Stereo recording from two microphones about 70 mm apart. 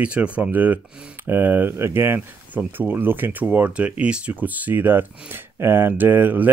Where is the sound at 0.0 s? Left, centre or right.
Centre.